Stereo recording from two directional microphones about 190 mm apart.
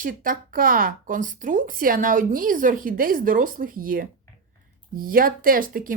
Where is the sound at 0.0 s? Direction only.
45° right (ahead or behind).